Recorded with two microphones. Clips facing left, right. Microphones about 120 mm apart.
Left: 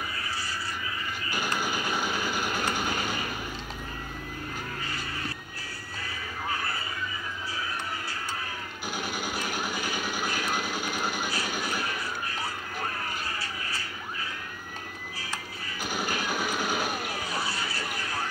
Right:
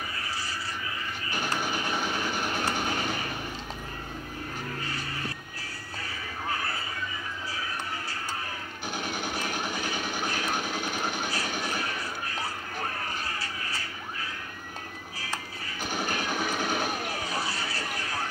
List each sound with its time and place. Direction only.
1.3 s vehicle: 5° left (ahead or behind)
8.9 s vehicle: 5° left (ahead or behind)
10.5 s a sound: 25° right (ahead or behind)
11.1 s train: 5° left (ahead or behind)
15.9 s vehicle: 5° left (ahead or behind)